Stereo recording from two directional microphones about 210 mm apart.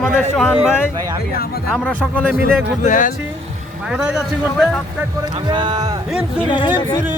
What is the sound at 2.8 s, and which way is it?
Speech, 40° left (ahead or behind).